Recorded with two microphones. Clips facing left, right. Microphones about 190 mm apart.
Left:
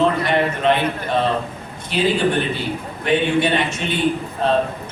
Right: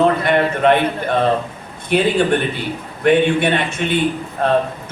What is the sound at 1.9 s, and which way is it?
A man's voice, 55° right (ahead or behind).